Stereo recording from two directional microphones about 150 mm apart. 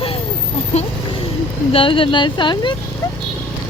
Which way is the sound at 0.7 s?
45° left (ahead or behind).